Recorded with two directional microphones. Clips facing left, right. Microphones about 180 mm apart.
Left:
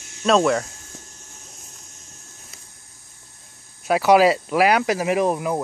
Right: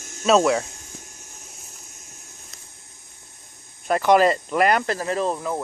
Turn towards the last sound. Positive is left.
turn(degrees=15)  # may be behind; listen again after turning